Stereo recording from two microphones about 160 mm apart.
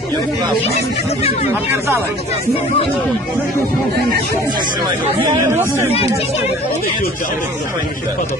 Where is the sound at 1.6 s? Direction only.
15° right (ahead or behind).